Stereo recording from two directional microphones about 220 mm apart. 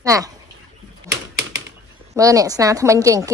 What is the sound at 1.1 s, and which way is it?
Typewriter, 50° right (ahead or behind).